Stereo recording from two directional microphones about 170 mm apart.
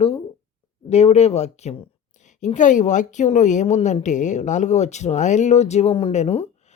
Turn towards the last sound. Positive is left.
turn(degrees=40)  # may be behind; listen again after turning